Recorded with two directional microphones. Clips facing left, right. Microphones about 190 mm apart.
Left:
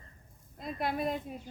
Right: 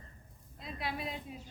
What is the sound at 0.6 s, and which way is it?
Speech, 50° left (ahead or behind).